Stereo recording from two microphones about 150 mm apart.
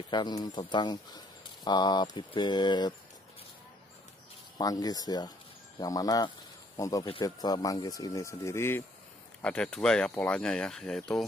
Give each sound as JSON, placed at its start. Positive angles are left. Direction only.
{"t": 0.1, "sound": "speech", "side_deg": 30}
{"t": 4.6, "sound": "speech", "side_deg": 25}